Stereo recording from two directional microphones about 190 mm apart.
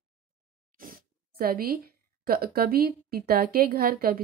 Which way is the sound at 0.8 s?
50° right (ahead or behind).